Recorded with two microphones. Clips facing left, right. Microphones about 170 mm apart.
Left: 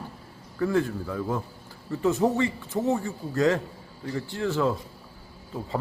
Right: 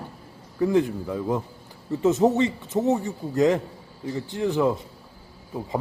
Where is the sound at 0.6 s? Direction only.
20° right (ahead or behind).